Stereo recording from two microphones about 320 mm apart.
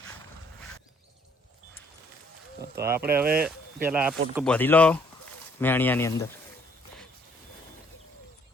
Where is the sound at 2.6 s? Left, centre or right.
Right.